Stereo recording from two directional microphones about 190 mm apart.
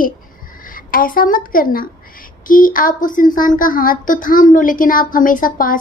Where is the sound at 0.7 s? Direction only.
45° left (ahead or behind).